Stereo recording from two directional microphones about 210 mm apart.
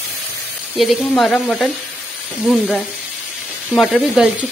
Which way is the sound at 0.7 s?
Centre (ahead or behind).